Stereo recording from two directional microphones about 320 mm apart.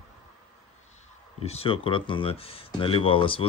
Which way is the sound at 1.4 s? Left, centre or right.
Centre.